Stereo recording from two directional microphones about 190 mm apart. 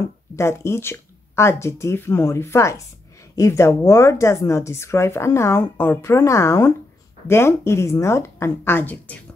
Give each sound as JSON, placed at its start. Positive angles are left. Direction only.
{"t": 0.4, "sound": "speech", "side_deg": 15}